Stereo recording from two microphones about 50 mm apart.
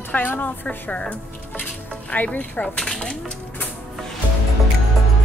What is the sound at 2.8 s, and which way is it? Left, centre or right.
Speech, centre.